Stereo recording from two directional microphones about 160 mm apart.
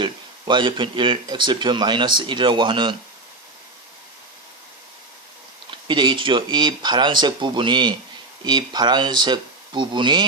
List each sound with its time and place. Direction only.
0.0 s speech: 30° right (ahead or behind)
5.7 s speech: 30° right (ahead or behind)